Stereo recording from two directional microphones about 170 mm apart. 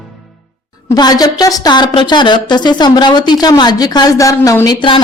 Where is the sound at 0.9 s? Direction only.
20° left (ahead or behind).